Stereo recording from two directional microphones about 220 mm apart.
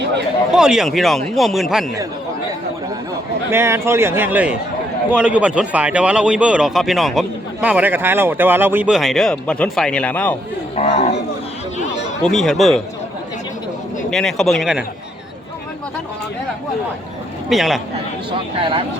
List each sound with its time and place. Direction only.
0.5 s speech: centre (ahead or behind)
3.5 s speech: 10° right (ahead or behind); by 10.3 s 5° left (ahead or behind)
10.8 s a man's voice: 30° left (ahead or behind)
12.2 s speech: centre (ahead or behind)
14.1 s speech: centre (ahead or behind)
17.5 s speech: centre (ahead or behind)